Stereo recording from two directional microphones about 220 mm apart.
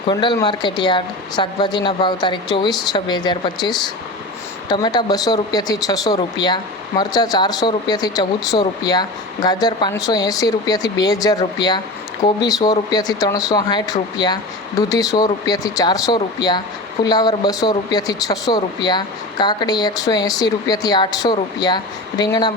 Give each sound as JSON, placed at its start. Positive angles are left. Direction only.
{"t": 0.1, "sound": "speech", "side_deg": 20}